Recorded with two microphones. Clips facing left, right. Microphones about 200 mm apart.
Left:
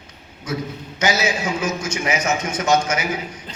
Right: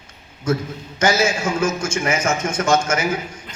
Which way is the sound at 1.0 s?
45° right (ahead or behind).